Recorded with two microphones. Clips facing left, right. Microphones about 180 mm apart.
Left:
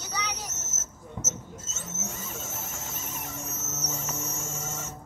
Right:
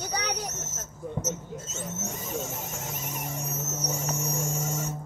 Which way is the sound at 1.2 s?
30° right (ahead or behind).